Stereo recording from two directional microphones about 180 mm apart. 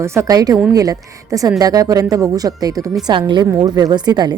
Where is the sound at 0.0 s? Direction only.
15° right (ahead or behind).